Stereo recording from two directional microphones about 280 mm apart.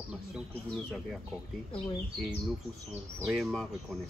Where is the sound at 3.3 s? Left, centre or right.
Centre.